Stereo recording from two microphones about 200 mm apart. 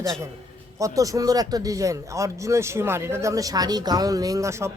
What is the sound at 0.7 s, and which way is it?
Speech, 15° right (ahead or behind).